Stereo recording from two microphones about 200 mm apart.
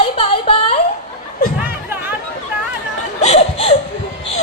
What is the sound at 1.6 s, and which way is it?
Music, 10° right (ahead or behind).